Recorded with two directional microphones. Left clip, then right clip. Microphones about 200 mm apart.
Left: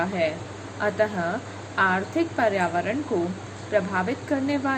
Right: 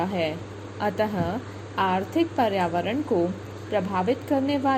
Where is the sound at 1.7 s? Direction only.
30° right (ahead or behind).